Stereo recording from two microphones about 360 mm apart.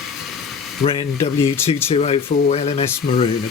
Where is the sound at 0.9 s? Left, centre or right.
Centre.